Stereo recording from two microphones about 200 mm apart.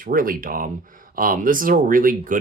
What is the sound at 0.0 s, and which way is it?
Speech, 45° right (ahead or behind).